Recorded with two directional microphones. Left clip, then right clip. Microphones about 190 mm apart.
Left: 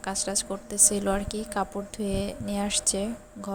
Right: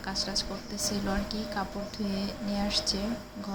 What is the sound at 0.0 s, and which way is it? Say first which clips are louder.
A woman's voice: left 2 dB; 50° left (ahead or behind).